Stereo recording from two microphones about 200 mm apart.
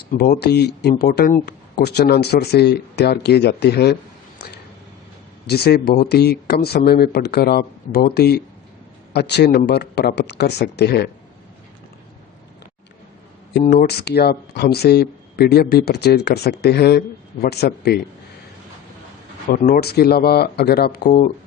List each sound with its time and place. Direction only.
0.1 s speech: 55° left (ahead or behind)
5.5 s speech: 55° left (ahead or behind)
13.5 s speech: 50° left (ahead or behind)
19.5 s speech: 50° left (ahead or behind)